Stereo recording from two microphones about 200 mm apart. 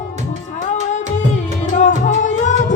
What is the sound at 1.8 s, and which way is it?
Music, 40° left (ahead or behind).